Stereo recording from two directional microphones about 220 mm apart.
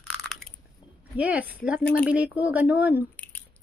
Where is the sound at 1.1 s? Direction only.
5° right (ahead or behind).